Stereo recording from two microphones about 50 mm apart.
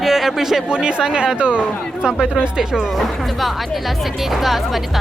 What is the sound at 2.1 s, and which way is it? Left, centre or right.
Speech, centre.